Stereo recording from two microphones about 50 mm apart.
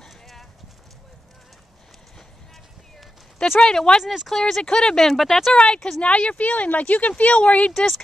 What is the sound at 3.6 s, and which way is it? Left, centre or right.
Speech, centre.